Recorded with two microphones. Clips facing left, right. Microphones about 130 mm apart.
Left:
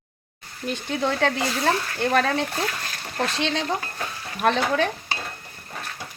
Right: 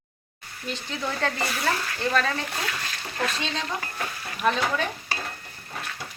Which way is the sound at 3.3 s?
75° left (ahead or behind).